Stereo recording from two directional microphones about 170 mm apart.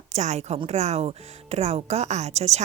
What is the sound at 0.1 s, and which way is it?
A woman's voice, 40° right (ahead or behind).